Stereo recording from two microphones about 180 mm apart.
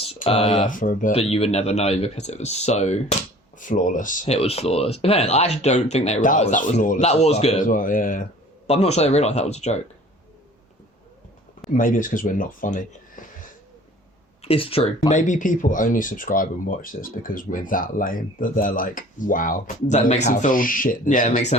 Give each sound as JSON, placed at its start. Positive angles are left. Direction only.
{"t": 0.3, "sound": "speech", "side_deg": 35}
{"t": 0.7, "sound": "speech", "side_deg": 50}
{"t": 1.1, "sound": "speech", "side_deg": 35}
{"t": 7.6, "sound": "speech", "side_deg": 50}
{"t": 8.6, "sound": "speech", "side_deg": 35}
{"t": 11.7, "sound": "speech", "side_deg": 45}
{"t": 14.4, "sound": "speech", "side_deg": 30}
{"t": 15.1, "sound": "speech", "side_deg": 40}